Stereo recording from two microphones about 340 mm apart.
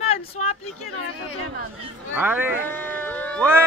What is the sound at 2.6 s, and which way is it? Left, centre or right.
Speech, centre.